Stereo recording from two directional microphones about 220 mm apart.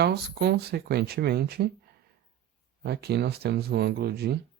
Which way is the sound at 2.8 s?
45° right (ahead or behind).